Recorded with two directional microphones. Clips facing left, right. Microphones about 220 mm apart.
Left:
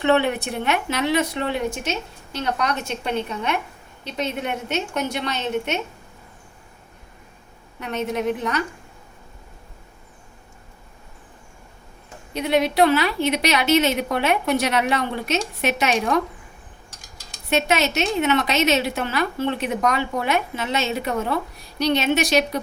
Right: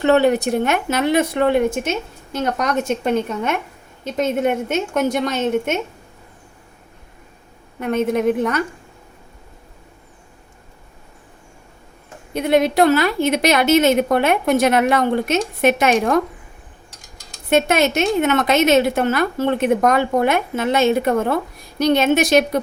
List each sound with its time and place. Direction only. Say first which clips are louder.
0.0 s a woman's voice: right 5 dB; 40° right (ahead or behind)
7.8 s a woman's voice: right 7 dB; 50° right (ahead or behind)
12.3 s a woman's voice: right 4 dB; 50° right (ahead or behind)
17.5 s a woman's voice: right 5 dB; 50° right (ahead or behind)